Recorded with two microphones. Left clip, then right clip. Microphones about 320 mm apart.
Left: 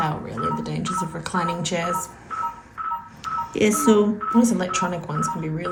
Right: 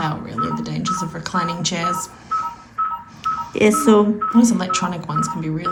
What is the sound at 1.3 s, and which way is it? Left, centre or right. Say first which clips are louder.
Speech: right 3 dB; centre.